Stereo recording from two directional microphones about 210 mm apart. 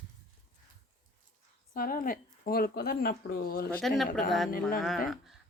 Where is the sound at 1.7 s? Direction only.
45° left (ahead or behind).